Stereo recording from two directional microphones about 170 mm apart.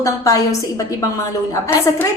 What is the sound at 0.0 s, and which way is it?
Speech, 20° left (ahead or behind).